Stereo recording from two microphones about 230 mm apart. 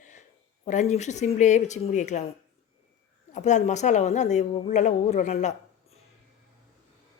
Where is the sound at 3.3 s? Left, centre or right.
Left.